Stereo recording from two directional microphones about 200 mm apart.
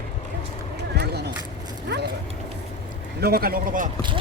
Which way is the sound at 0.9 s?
55° right (ahead or behind).